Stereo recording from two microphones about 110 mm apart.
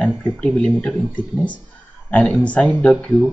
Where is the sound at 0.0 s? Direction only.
10° left (ahead or behind).